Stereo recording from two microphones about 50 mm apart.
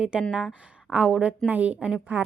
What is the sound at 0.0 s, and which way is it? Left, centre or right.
A woman's voice, centre.